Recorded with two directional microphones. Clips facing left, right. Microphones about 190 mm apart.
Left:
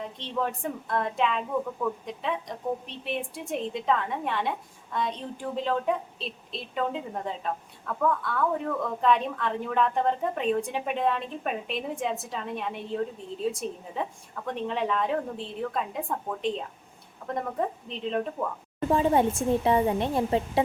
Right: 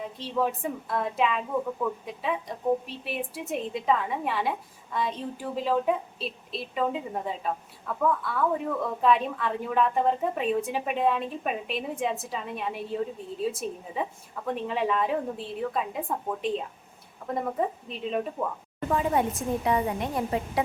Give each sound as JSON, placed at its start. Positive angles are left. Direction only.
{"t": 0.2, "sound": "a woman's voice", "side_deg": -5}
{"t": 18.9, "sound": "speech", "side_deg": 30}